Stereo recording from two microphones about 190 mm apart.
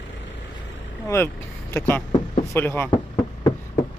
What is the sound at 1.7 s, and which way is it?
Speech, 15° left (ahead or behind).